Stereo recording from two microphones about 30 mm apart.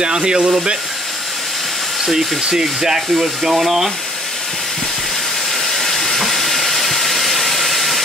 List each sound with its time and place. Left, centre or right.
0.0 s speech: right
2.0 s speech: centre
3.5 s speech: centre
5.7 s steam: centre